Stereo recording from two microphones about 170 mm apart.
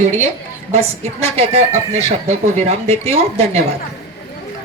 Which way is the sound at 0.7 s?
35° right (ahead or behind).